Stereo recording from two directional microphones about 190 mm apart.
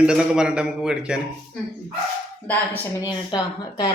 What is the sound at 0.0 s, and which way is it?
A man's voice, 5° right (ahead or behind).